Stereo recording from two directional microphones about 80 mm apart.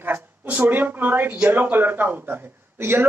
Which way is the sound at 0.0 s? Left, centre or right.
Right.